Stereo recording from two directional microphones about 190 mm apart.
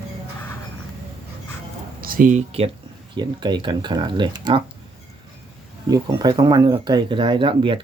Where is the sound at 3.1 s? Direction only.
25° right (ahead or behind).